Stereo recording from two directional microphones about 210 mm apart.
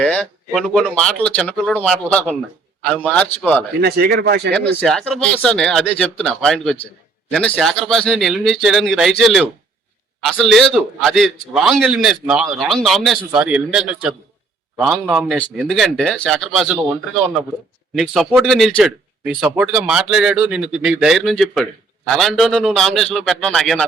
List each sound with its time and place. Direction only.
0.0 s a man's voice: 5° left (ahead or behind)
3.8 s speech: 50° right (ahead or behind)
4.5 s a man's voice: 5° left (ahead or behind)
17.9 s a man's voice: centre (ahead or behind)